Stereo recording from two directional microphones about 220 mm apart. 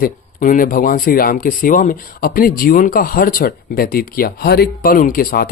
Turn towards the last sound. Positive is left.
turn(degrees=40)  # may be behind; listen again after turning